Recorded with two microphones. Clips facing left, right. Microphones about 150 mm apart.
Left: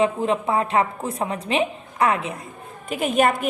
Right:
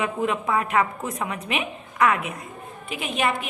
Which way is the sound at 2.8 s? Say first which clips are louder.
Left 6 dB; 45° left (ahead or behind).